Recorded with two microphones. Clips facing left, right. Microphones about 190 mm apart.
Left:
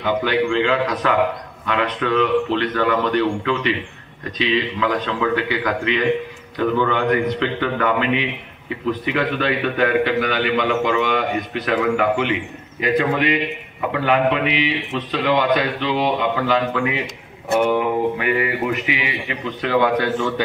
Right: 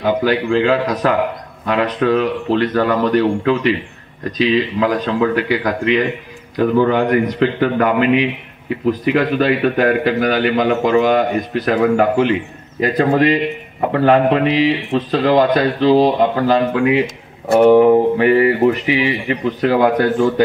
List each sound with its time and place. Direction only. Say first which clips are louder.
0.0 s a man's voice: right 3 dB; 40° right (ahead or behind)